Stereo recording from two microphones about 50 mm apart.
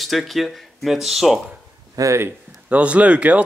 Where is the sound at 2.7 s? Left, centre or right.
Right.